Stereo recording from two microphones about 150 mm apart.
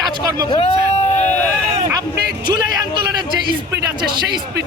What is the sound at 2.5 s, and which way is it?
Speech, 30° right (ahead or behind).